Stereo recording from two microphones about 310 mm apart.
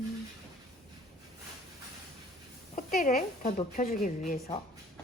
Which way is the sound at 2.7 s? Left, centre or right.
Left.